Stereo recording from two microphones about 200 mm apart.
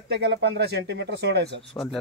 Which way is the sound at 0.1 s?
60° right (ahead or behind).